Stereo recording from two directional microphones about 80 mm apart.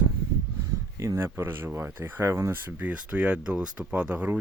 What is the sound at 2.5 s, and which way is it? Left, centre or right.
Speech, centre.